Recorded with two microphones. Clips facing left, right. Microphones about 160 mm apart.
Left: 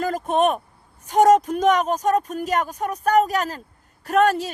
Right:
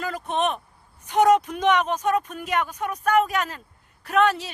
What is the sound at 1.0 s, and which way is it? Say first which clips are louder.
A woman's voice: left 3 dB; 40° left (ahead or behind).